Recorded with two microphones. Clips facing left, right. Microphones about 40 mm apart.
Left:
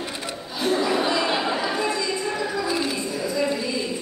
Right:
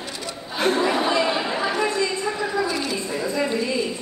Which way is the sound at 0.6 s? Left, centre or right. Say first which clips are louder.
Right 1 dB; right.